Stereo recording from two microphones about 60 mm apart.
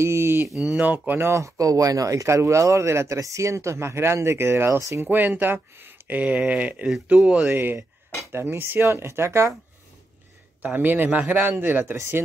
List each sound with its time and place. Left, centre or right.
0.0 s a sound: right
0.6 s speech: centre
0.8 s speech: right
1.2 s speech: right
5.0 s speech: right
7.4 s speech: right
10.6 s speech: right